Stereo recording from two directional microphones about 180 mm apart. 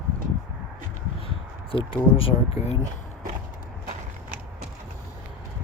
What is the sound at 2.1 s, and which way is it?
Speech, 35° left (ahead or behind).